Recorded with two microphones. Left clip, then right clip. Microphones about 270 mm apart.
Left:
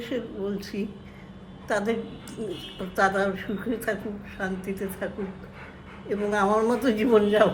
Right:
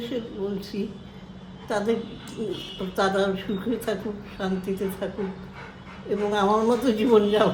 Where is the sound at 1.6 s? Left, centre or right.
Centre.